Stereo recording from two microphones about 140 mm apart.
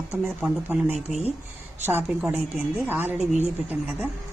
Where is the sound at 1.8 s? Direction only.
10° right (ahead or behind).